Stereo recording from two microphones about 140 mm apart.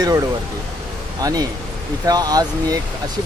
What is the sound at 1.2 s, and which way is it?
Speech, 25° right (ahead or behind).